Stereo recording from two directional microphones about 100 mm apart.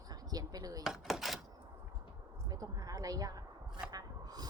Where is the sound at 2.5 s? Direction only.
40° right (ahead or behind).